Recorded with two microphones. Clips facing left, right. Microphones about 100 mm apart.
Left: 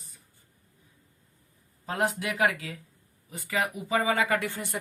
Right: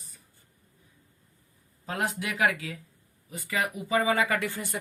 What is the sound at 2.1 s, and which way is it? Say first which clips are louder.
Speech: even; 40° left (ahead or behind).